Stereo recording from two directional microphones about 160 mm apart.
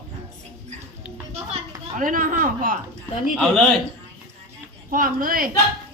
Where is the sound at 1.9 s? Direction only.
55° right (ahead or behind).